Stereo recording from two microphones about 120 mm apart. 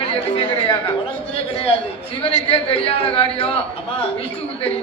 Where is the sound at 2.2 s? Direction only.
55° left (ahead or behind).